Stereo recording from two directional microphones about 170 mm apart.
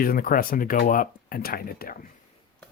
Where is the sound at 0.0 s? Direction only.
60° left (ahead or behind).